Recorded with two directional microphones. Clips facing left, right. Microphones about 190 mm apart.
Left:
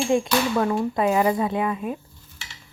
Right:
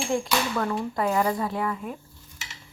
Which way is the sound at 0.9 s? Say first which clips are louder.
Left 2 dB; 20° left (ahead or behind).